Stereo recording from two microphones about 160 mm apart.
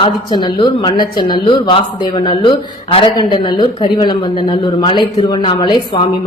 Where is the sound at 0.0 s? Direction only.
30° left (ahead or behind).